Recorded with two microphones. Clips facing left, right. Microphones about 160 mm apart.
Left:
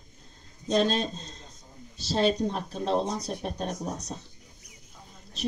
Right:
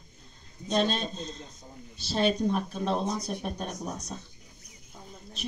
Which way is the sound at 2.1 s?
35° left (ahead or behind).